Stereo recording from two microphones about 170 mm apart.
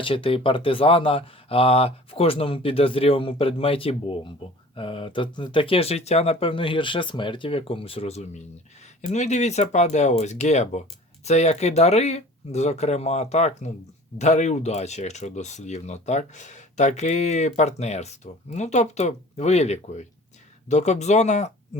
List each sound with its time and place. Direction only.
0.0 s speech: 30° left (ahead or behind)